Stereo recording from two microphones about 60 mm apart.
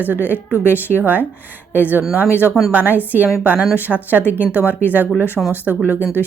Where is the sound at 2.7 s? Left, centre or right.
Right.